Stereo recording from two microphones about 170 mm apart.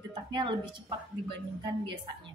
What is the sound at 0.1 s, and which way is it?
Speech, 25° right (ahead or behind).